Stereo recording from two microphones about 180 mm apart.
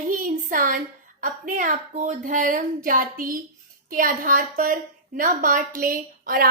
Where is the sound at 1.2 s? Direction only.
45° right (ahead or behind).